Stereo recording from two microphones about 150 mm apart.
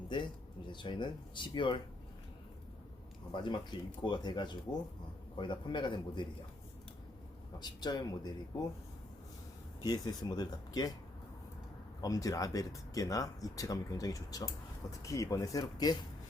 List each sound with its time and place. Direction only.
0.1 s speech: 30° left (ahead or behind)
3.3 s speech: 30° left (ahead or behind)
7.6 s speech: 30° left (ahead or behind)
9.8 s speech: 25° left (ahead or behind)
11.9 s speech: 25° left (ahead or behind)